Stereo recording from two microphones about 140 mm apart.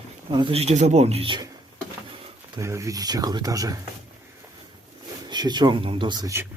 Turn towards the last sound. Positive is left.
turn(degrees=-30)  # may be behind; listen again after turning